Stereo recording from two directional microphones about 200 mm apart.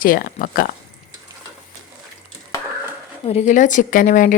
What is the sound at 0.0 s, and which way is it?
Speech, 45° left (ahead or behind).